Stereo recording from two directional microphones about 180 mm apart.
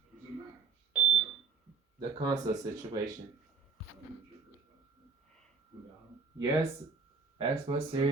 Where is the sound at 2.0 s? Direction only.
20° right (ahead or behind).